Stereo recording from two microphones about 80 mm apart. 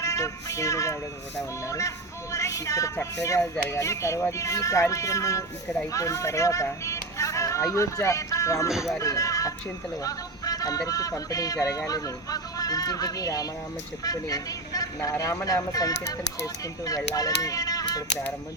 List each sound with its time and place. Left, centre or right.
0.0 s speech: left
8.7 s speech: centre
9.0 s speech: left
17.2 s speech: left